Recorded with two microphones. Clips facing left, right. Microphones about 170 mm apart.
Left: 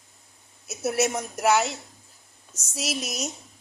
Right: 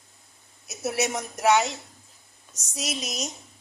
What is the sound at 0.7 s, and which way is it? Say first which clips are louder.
A woman's voice: left 3 dB; centre (ahead or behind).